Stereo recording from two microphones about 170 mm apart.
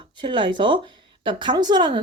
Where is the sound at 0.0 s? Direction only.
30° right (ahead or behind).